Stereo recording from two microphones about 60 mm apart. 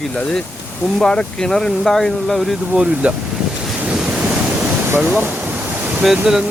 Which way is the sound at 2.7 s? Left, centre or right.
Right.